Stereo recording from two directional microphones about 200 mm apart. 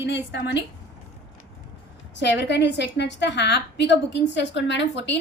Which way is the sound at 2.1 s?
60° left (ahead or behind).